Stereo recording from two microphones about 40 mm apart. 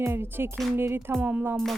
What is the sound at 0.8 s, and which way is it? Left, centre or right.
Music, right.